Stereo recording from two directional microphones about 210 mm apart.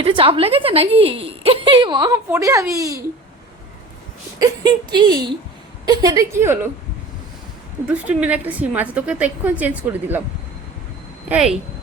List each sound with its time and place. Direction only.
0.0 s a woman's voice: 25° right (ahead or behind)
4.4 s a woman's voice: 20° right (ahead or behind)
7.9 s a woman's voice: 5° right (ahead or behind)
11.3 s a woman's voice: 5° right (ahead or behind)